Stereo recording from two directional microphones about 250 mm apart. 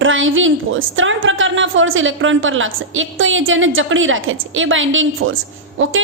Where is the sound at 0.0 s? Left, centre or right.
Right.